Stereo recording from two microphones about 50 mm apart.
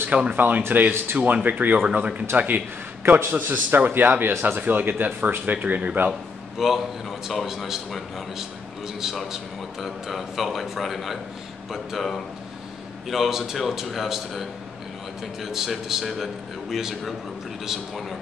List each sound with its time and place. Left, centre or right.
0.1 s speech: right
0.4 s a man's voice: right
6.6 s a man's voice: centre
15.4 s a man's voice: centre